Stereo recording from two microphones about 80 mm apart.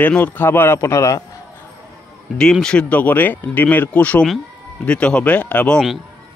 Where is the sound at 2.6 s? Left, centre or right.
Centre.